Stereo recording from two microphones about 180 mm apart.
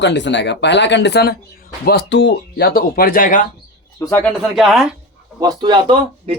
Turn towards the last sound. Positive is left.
turn(degrees=-25)  # may be behind; listen again after turning